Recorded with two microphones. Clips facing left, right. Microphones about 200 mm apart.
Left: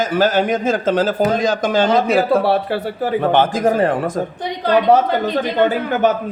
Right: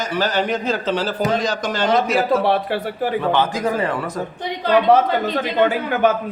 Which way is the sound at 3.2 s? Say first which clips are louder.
Left 6 dB; 50° left (ahead or behind).